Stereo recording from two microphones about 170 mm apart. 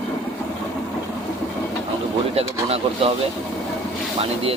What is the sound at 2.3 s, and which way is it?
Speech, 35° right (ahead or behind).